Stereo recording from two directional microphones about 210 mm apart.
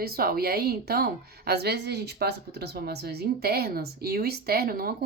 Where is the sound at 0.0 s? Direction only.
45° right (ahead or behind).